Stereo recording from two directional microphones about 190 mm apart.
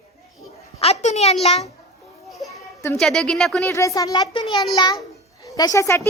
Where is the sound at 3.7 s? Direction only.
15° left (ahead or behind).